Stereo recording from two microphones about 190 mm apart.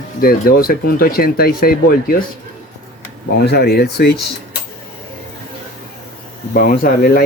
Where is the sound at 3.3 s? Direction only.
60° left (ahead or behind).